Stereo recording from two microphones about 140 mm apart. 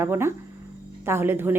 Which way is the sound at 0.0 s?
20° right (ahead or behind).